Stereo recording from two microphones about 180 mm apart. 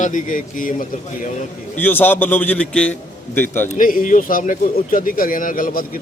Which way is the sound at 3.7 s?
50° left (ahead or behind).